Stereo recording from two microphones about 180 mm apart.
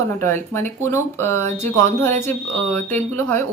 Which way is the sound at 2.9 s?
15° left (ahead or behind).